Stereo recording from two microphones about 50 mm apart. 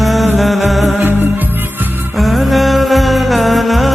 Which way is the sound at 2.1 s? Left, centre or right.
Centre.